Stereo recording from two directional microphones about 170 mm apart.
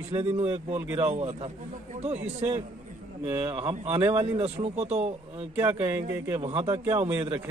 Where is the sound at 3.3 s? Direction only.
25° right (ahead or behind).